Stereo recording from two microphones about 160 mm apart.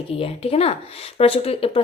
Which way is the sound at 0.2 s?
40° left (ahead or behind).